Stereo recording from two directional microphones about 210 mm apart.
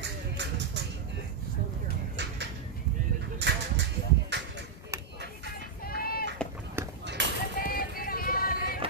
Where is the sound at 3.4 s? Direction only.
55° right (ahead or behind).